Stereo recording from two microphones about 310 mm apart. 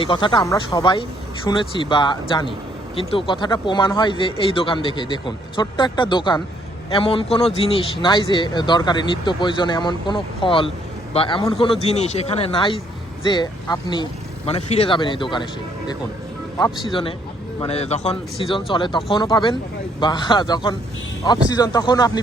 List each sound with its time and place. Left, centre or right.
0.0 s speech: centre
16.8 s speech: centre